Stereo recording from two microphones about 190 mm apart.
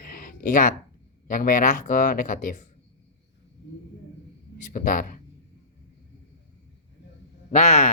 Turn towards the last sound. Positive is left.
turn(degrees=35)  # may be behind; listen again after turning